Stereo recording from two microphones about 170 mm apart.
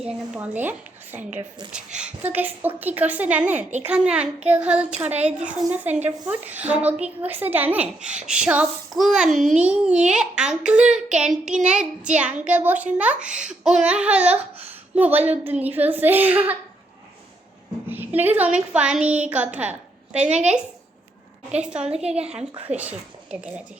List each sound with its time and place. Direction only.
0.0 s a woman's voice: 10° right (ahead or behind)
13.1 s a child's voice: 45° right (ahead or behind)
13.4 s a woman's voice: 5° right (ahead or behind)
17.8 s a woman's voice: 10° right (ahead or behind)
22.5 s speech: 35° right (ahead or behind)
22.8 s a woman's voice: 10° right (ahead or behind)